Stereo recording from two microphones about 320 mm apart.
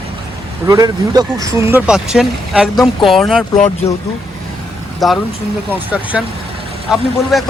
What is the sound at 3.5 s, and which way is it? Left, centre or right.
Speech, left.